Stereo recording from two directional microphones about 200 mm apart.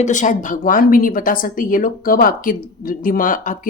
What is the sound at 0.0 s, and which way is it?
Speech, 40° left (ahead or behind).